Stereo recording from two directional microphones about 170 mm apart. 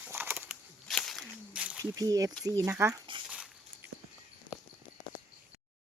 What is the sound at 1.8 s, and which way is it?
Speech, 20° right (ahead or behind).